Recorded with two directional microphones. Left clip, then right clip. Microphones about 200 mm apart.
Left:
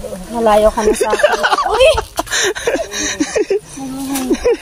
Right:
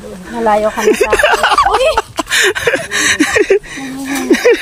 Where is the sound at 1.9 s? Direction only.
35° right (ahead or behind).